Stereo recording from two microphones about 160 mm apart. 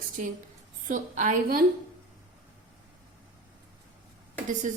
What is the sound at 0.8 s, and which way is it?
Speech, 55° right (ahead or behind).